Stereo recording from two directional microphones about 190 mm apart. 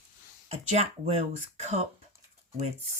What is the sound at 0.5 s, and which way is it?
Speech, 35° right (ahead or behind).